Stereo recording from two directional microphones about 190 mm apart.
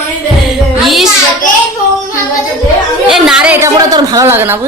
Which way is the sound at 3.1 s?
5° right (ahead or behind).